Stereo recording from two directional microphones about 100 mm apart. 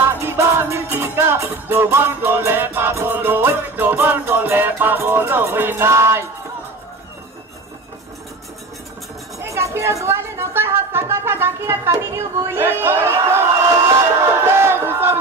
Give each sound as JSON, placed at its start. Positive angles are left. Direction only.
{"t": 0.1, "sound": "music", "side_deg": -25}
{"t": 9.4, "sound": "speech", "side_deg": -30}
{"t": 11.9, "sound": "a sound", "side_deg": -25}
{"t": 14.4, "sound": "battle cry", "side_deg": -25}